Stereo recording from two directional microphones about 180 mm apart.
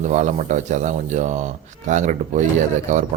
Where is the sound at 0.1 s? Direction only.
40° right (ahead or behind).